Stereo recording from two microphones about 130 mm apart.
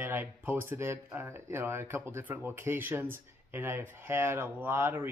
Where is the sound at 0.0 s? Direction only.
15° right (ahead or behind).